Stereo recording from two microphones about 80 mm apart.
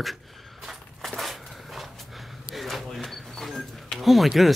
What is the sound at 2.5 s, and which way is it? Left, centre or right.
Music, centre.